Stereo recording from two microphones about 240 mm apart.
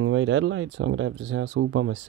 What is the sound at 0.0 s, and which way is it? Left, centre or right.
Speech, right.